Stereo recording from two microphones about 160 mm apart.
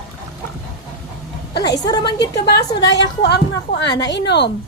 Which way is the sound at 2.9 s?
90° left.